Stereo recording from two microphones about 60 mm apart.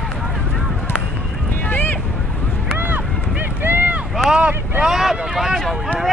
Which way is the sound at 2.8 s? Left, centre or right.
Right.